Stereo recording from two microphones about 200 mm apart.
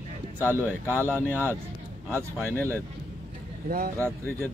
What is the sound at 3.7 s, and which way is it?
Speech, 45° right (ahead or behind).